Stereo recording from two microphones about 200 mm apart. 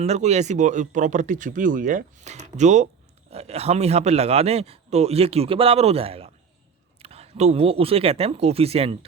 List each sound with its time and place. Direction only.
0.0 s a man's voice: 35° right (ahead or behind)